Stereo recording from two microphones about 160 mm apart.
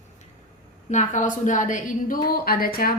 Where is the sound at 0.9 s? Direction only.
50° left (ahead or behind).